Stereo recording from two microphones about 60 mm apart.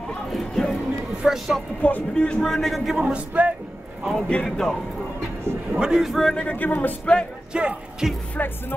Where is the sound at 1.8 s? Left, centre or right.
Left; by 2.8 s centre.